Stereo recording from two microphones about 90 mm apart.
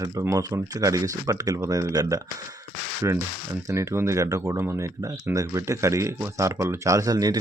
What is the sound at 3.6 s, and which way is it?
Speech, 35° right (ahead or behind).